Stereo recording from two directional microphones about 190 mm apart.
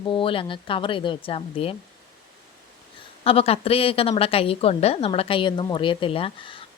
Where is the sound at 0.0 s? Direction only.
25° left (ahead or behind).